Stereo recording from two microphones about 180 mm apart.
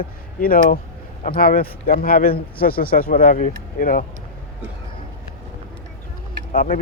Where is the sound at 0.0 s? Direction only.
50° left (ahead or behind).